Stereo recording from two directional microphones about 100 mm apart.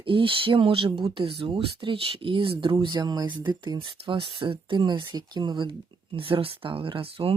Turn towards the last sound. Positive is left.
turn(degrees=-65)  # may be behind; listen again after turning